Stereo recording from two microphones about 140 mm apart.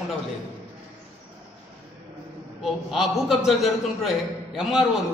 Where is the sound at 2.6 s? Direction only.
Centre (ahead or behind).